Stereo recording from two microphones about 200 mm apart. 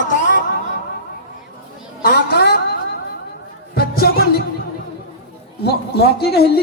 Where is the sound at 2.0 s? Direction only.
50° left (ahead or behind).